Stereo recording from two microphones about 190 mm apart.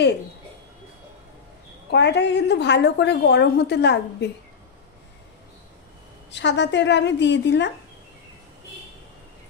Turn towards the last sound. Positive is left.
turn(degrees=65)  # may be behind; listen again after turning